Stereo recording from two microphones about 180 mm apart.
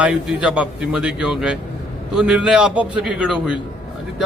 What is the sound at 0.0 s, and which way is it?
Speech, 5° right (ahead or behind).